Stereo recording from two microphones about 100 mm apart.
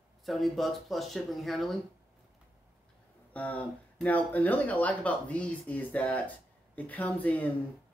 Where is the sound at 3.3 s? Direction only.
15° left (ahead or behind).